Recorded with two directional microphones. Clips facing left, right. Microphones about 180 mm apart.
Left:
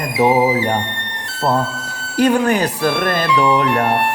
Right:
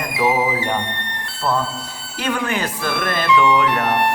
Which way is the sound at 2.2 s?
40° left (ahead or behind).